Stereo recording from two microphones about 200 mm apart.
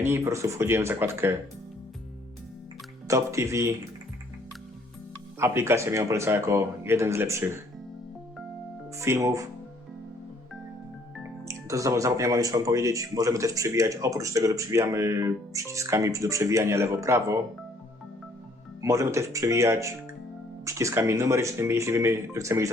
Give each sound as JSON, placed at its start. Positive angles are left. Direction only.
{"t": 0.0, "sound": "speech", "side_deg": -15}
{"t": 3.1, "sound": "speech", "side_deg": -15}
{"t": 5.4, "sound": "speech", "side_deg": -10}
{"t": 9.0, "sound": "speech", "side_deg": -15}
{"t": 11.4, "sound": "speech", "side_deg": -15}
{"t": 18.8, "sound": "speech", "side_deg": -15}